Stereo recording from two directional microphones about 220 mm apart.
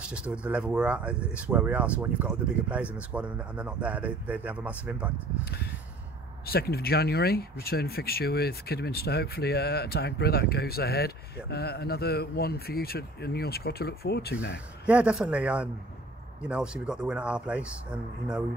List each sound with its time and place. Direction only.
0.0 s speech: 5° right (ahead or behind)
5.4 s speech: 45° left (ahead or behind)
14.9 s speech: 5° right (ahead or behind)